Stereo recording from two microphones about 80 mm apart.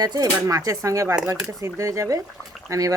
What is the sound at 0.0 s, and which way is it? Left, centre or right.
Speech, right.